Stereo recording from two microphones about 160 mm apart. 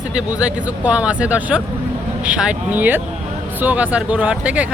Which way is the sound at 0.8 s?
5° right (ahead or behind).